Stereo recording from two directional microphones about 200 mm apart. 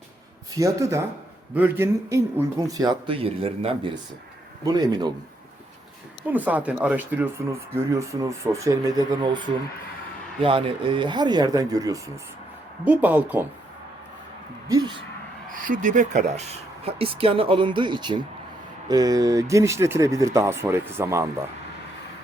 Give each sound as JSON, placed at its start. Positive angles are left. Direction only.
{"t": 0.5, "sound": "a man's voice", "side_deg": -15}
{"t": 6.2, "sound": "a man's voice", "side_deg": -10}
{"t": 10.4, "sound": "a man's voice", "side_deg": -25}
{"t": 14.7, "sound": "speech", "side_deg": -20}
{"t": 15.5, "sound": "a man's voice", "side_deg": -40}